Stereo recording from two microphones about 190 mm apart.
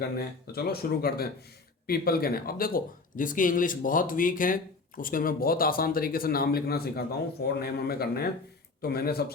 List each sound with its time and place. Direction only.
0.5 s speech: 55° left (ahead or behind)